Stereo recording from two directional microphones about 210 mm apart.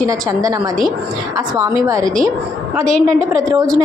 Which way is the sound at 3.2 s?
15° right (ahead or behind).